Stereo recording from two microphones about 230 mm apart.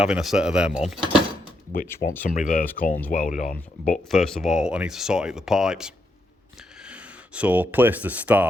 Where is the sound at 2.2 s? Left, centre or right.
Left.